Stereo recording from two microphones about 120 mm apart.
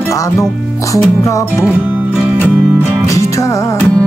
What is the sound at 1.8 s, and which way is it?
Music, 15° right (ahead or behind).